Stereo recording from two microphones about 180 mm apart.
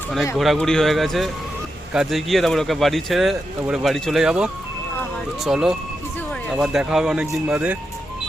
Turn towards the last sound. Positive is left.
turn(degrees=-5)  # may be behind; listen again after turning